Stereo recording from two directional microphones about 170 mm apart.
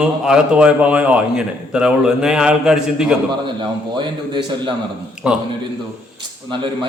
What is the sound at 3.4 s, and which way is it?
A man's voice, 25° right (ahead or behind).